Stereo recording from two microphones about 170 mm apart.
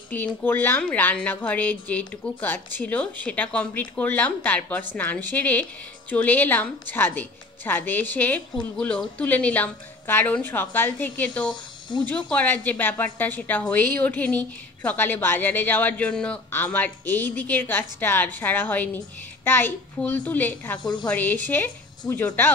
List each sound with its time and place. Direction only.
0.1 s a woman's voice: 10° left (ahead or behind)
20.8 s a woman's voice: 25° left (ahead or behind)
21.1 s a woman's voice: 10° left (ahead or behind)